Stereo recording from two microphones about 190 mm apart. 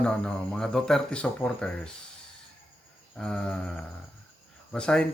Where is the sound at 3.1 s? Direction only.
5° left (ahead or behind).